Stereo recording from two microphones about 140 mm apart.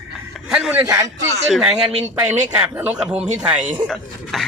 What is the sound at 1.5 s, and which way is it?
A man's voice, 5° right (ahead or behind).